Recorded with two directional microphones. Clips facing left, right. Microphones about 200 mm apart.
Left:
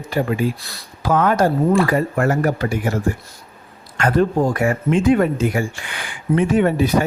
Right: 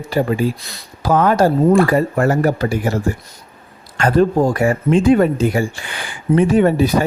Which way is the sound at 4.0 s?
30° right (ahead or behind).